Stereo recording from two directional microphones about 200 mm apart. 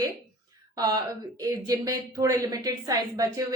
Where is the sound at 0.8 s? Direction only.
20° right (ahead or behind).